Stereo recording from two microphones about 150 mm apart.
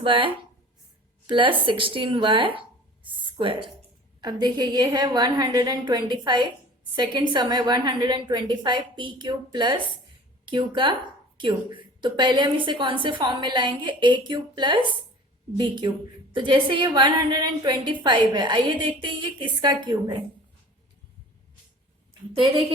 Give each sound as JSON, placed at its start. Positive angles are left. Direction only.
{"t": 0.0, "sound": "speech", "side_deg": -35}
{"t": 1.3, "sound": "a woman's voice", "side_deg": -35}
{"t": 22.3, "sound": "a woman's voice", "side_deg": -35}